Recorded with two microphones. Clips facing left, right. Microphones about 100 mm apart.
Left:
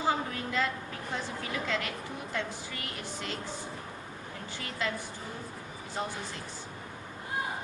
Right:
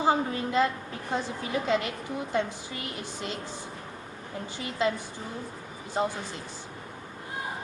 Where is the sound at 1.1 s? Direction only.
20° right (ahead or behind).